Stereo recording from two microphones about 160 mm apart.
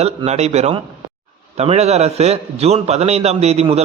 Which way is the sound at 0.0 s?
40° right (ahead or behind).